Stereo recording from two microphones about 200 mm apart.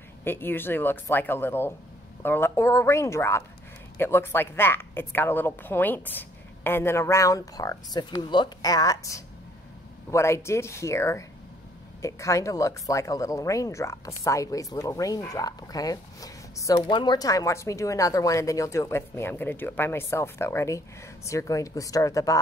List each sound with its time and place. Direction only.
0.2 s speech: 10° left (ahead or behind)